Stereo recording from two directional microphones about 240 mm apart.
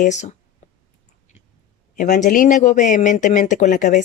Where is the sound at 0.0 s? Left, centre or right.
Left.